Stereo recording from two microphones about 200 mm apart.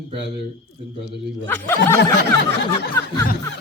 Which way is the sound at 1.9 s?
60° left (ahead or behind).